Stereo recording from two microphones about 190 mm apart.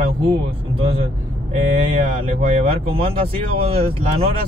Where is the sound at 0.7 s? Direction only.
30° right (ahead or behind).